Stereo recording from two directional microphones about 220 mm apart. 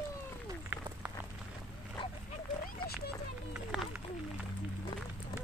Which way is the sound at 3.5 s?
Centre (ahead or behind).